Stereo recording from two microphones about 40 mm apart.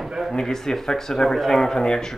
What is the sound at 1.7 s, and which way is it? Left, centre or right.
Speech, left.